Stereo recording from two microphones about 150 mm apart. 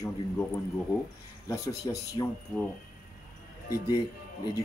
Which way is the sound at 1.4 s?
25° left (ahead or behind).